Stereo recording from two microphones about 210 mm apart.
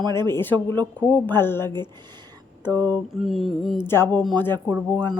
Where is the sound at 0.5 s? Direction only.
20° right (ahead or behind).